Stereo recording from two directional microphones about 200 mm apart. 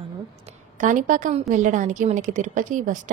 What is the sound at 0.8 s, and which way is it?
A woman's voice, 40° right (ahead or behind).